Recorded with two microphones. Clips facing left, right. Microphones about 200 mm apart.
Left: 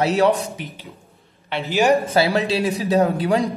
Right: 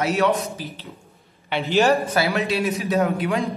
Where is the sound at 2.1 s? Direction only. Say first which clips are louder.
Left 3 dB; 30° left (ahead or behind).